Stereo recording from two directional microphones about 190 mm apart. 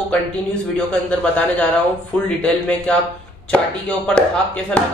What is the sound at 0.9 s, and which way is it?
Speech, 5° left (ahead or behind).